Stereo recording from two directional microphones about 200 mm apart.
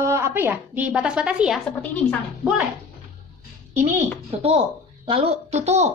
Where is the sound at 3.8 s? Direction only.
35° right (ahead or behind).